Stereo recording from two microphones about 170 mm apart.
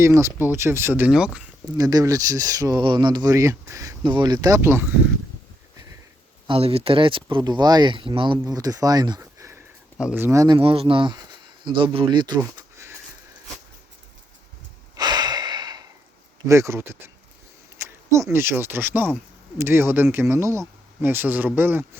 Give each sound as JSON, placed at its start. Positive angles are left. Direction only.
{"t": 0.0, "sound": "speech", "side_deg": -15}
{"t": 1.8, "sound": "speech", "side_deg": -20}
{"t": 6.5, "sound": "speech", "side_deg": -35}
{"t": 10.6, "sound": "speech", "side_deg": -35}
{"t": 12.5, "sound": "a sound", "side_deg": -15}
{"t": 14.9, "sound": "breathing", "side_deg": -25}
{"t": 16.5, "sound": "speech", "side_deg": -15}